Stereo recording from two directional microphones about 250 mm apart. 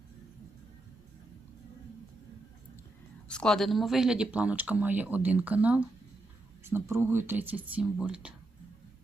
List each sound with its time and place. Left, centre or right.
3.2 s speech: centre